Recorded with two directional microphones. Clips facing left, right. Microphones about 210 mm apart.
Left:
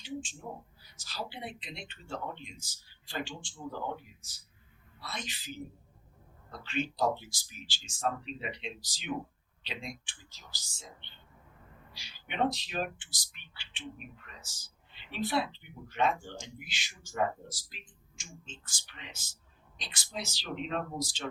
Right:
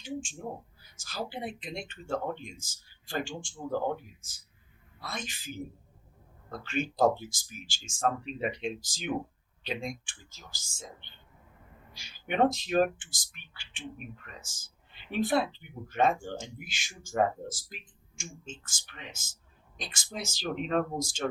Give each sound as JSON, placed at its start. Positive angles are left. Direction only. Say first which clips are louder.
{"t": 0.0, "sound": "a sound", "louder": "right 2 dB", "side_deg": -45}
{"t": 0.9, "sound": "speech", "louder": "right 4 dB", "side_deg": -50}
{"t": 15.1, "sound": "speech", "louder": "right 4 dB", "side_deg": -50}